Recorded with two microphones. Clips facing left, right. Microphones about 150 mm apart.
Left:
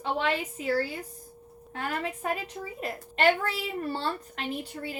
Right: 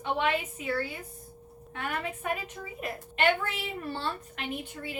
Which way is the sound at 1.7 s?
35° left (ahead or behind).